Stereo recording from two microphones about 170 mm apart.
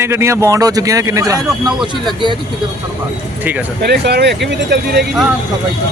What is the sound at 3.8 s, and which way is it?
Speech, 75° right (ahead or behind).